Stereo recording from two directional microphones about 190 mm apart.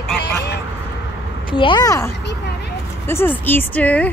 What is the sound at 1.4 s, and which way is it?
A woman's voice, 25° left (ahead or behind).